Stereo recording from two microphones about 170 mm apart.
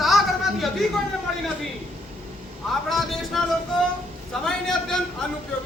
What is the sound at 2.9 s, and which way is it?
Speech, centre (ahead or behind).